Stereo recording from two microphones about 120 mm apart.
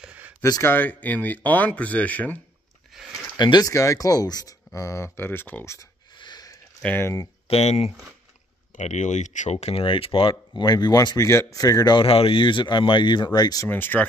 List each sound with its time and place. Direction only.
0.0 s a sound: 10° right (ahead or behind)
0.4 s speech: 25° left (ahead or behind)
2.9 s a sound: 5° right (ahead or behind)
3.3 s speech: 35° left (ahead or behind); by 5.9 s 20° left (ahead or behind)
6.1 s a sound: 35° left (ahead or behind)
6.8 s speech: 15° left (ahead or behind)
7.4 s speech: 60° left (ahead or behind)
8.7 s speech: 85° left; by 12.1 s 35° left (ahead or behind)
12.1 s speech: 50° left (ahead or behind); by 13.7 s 35° left (ahead or behind)
13.7 s speech: 15° left (ahead or behind)